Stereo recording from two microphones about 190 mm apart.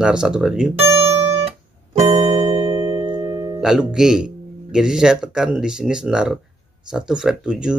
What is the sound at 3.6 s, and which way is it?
Speech, 5° right (ahead or behind).